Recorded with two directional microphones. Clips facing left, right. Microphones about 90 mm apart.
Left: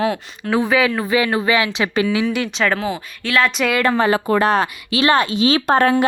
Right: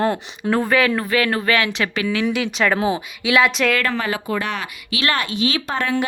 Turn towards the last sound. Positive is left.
turn(degrees=40)  # may be behind; listen again after turning